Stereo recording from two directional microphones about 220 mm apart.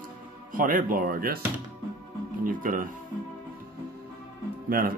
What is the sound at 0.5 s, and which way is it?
Music, 40° right (ahead or behind).